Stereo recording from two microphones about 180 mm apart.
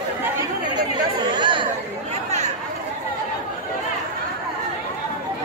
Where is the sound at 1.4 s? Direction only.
25° right (ahead or behind).